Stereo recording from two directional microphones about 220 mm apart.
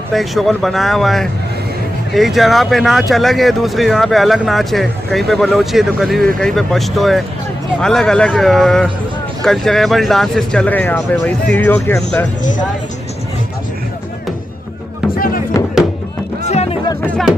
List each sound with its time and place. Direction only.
0.1 s speech: centre (ahead or behind)
15.1 s music: 40° left (ahead or behind)
16.4 s music: 30° left (ahead or behind)